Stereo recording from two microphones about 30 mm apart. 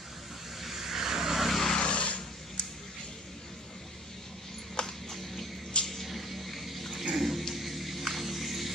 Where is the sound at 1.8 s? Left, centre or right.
Left.